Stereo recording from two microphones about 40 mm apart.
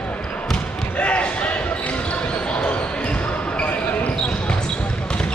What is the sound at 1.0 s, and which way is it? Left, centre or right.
Basketball bounce, left.